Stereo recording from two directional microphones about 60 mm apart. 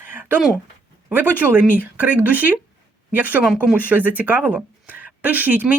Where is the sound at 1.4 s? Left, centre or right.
Right.